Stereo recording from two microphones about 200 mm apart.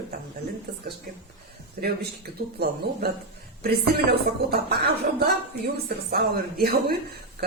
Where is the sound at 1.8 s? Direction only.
45° right (ahead or behind).